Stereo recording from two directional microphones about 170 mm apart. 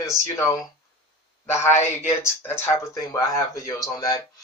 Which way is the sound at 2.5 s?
15° left (ahead or behind).